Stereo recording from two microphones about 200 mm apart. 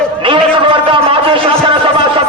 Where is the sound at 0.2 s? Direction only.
25° right (ahead or behind).